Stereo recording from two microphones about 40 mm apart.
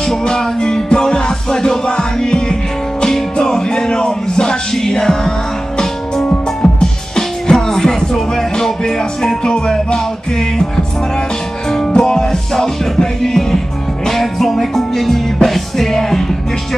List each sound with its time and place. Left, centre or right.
0.2 s music: centre
6.2 s music: left
7.2 s music: centre
11.9 s music: centre